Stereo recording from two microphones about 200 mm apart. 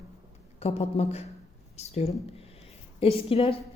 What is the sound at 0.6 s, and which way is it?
Speech, 30° left (ahead or behind).